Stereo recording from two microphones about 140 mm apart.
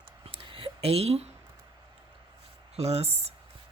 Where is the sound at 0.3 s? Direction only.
40° right (ahead or behind).